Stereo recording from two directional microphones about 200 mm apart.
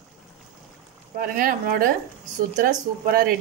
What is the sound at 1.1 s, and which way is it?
Speech, 45° right (ahead or behind).